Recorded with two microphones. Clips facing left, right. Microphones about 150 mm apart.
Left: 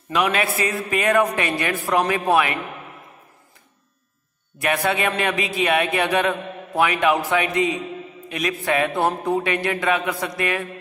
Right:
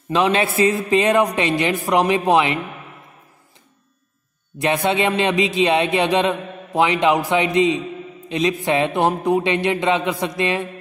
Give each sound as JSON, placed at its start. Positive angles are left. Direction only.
{"t": 0.1, "sound": "speech", "side_deg": -25}
{"t": 4.6, "sound": "speech", "side_deg": -20}